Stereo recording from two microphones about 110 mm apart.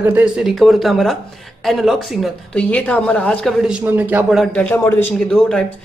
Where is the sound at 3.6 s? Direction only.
10° right (ahead or behind).